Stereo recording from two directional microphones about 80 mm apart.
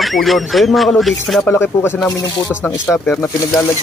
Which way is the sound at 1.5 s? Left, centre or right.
Left.